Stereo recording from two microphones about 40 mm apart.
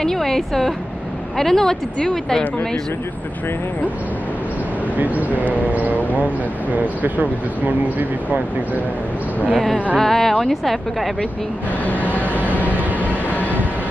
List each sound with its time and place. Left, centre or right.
0.0 s speech: centre
4.9 s speech: right
9.5 s a woman's voice: centre
11.8 s vehicle: left
12.6 s vehicle: right
13.4 s vehicle: left